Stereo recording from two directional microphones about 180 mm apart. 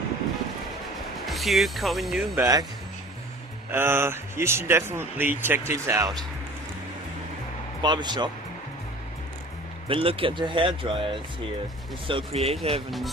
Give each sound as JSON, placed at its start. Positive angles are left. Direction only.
{"t": 1.2, "sound": "speech", "side_deg": 0}
{"t": 2.3, "sound": "speech", "side_deg": -15}
{"t": 3.7, "sound": "speech", "side_deg": -15}
{"t": 7.8, "sound": "speech", "side_deg": -25}
{"t": 9.8, "sound": "speech", "side_deg": -30}